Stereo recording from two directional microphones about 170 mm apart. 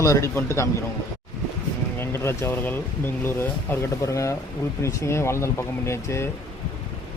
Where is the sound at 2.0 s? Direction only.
15° left (ahead or behind).